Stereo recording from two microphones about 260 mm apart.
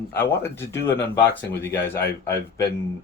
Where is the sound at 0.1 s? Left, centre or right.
Centre.